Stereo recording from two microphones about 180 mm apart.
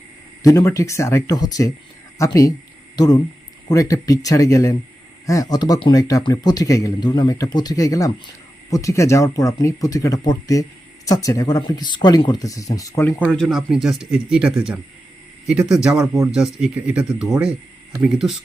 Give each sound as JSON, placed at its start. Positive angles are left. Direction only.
{"t": 0.4, "sound": "speech", "side_deg": 20}
{"t": 13.3, "sound": "speech", "side_deg": 0}